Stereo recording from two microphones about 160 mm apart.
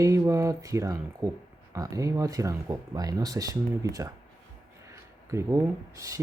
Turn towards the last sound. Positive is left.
turn(degrees=-20)  # may be behind; listen again after turning